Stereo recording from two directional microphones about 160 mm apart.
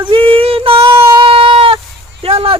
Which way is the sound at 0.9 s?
15° right (ahead or behind).